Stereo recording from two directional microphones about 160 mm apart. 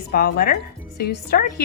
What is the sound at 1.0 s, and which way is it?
Speech, 80° left.